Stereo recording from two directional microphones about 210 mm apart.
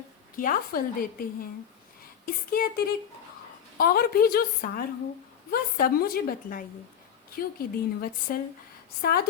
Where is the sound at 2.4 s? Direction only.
45° left (ahead or behind).